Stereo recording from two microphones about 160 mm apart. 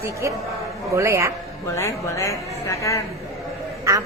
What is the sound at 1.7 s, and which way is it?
Speech, 20° left (ahead or behind).